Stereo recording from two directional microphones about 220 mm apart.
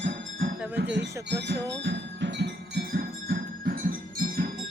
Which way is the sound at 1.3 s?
50° right (ahead or behind).